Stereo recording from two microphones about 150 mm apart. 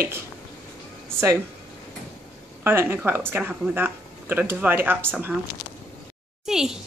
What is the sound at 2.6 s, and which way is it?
Speech, 15° right (ahead or behind).